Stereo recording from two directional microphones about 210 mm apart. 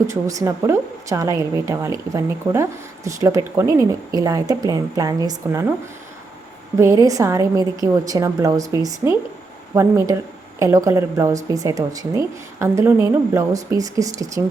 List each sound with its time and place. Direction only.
0.1 s a woman's voice: 15° right (ahead or behind)
6.7 s a woman's voice: 15° right (ahead or behind)